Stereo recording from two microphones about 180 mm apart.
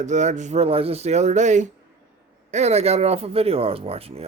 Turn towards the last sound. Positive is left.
turn(degrees=-35)  # may be behind; listen again after turning